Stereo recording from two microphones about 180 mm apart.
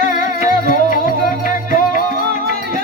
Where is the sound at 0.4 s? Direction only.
50° left (ahead or behind).